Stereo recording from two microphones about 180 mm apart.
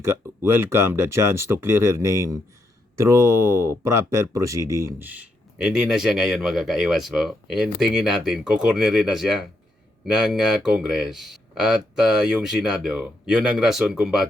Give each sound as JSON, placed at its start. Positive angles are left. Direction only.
{"t": 0.0, "sound": "speech", "side_deg": -15}
{"t": 3.7, "sound": "speech", "side_deg": -15}